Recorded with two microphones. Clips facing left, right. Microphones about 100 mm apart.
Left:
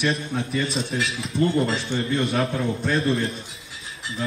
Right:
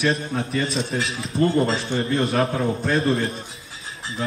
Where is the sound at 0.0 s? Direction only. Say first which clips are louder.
Right 2 dB; 35° right (ahead or behind).